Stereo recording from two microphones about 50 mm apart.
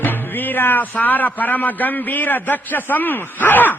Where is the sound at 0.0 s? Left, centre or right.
Left.